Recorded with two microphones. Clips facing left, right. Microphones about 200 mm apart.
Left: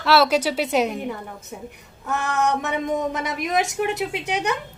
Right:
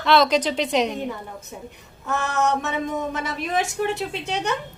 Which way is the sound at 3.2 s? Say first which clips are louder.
Left 2 dB; 20° left (ahead or behind).